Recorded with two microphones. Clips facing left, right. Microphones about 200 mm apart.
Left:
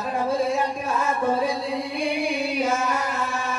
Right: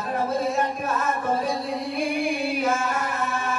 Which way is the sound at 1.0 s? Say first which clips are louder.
Left 4 dB; 50° right (ahead or behind).